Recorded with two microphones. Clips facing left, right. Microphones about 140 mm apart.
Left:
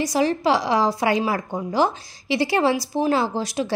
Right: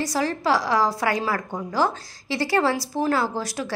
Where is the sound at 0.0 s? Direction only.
20° left (ahead or behind).